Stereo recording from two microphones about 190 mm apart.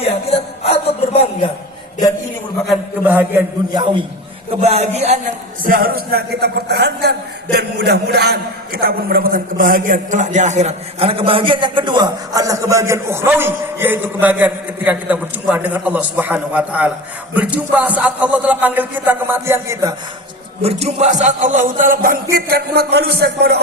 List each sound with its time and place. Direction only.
0.0 s a sound: 30° left (ahead or behind)
3.1 s a man's voice: 10° right (ahead or behind)
4.6 s a man's voice: 35° right (ahead or behind)
5.6 s a man's voice: 50° right (ahead or behind); by 19.9 s 15° right (ahead or behind)
20.6 s music: 35° right (ahead or behind); by 23.6 s 60° right (ahead or behind)